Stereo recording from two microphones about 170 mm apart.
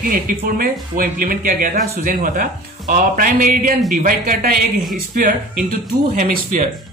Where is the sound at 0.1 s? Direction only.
60° right (ahead or behind).